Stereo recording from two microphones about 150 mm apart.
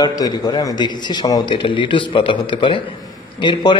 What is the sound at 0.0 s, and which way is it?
A man's voice, 25° left (ahead or behind).